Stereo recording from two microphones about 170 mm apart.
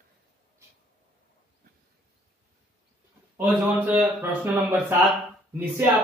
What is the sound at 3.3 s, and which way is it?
Speech, 10° right (ahead or behind).